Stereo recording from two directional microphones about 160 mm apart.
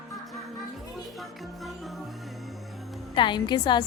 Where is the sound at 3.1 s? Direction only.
30° left (ahead or behind).